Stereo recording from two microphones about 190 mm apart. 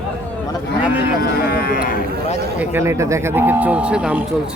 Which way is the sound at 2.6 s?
15° right (ahead or behind).